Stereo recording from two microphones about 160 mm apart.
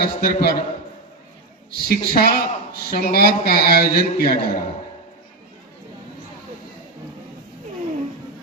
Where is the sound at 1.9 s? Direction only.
70° left (ahead or behind).